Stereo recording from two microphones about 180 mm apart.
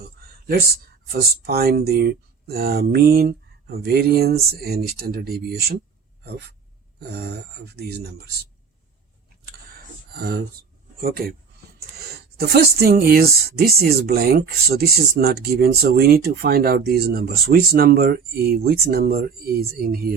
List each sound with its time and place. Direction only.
0.4 s speech: 55° right (ahead or behind)
7.1 s speech: 60° right (ahead or behind)
10.1 s speech: 60° right (ahead or behind)
12.4 s speech: 65° right (ahead or behind)